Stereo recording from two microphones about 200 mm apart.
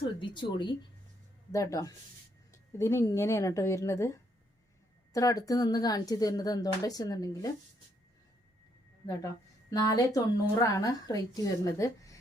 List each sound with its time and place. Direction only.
0.0 s speech: 25° left (ahead or behind)
9.0 s a woman's voice: 15° left (ahead or behind)